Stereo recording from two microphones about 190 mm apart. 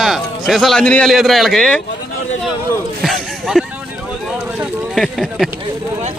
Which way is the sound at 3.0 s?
Centre (ahead or behind).